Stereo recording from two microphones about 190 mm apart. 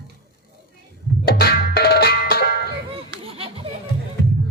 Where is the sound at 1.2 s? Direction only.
55° left (ahead or behind).